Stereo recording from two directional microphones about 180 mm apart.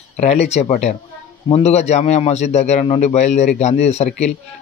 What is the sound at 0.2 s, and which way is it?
A man's voice, 40° left (ahead or behind).